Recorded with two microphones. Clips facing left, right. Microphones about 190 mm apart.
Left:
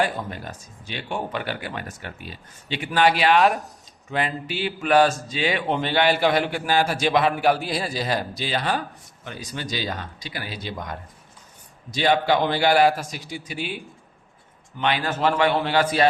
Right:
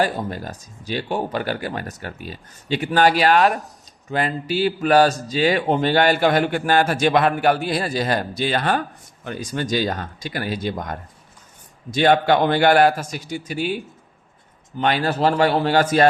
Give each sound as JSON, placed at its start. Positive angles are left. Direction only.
{"t": 0.0, "sound": "speech", "side_deg": -40}
{"t": 3.3, "sound": "a man's voice", "side_deg": 0}
{"t": 4.4, "sound": "a man's voice", "side_deg": -40}
{"t": 7.1, "sound": "a man's voice", "side_deg": 0}
{"t": 8.4, "sound": "a man's voice", "side_deg": -55}
{"t": 12.8, "sound": "a man's voice", "side_deg": 0}
{"t": 13.5, "sound": "a man's voice", "side_deg": -40}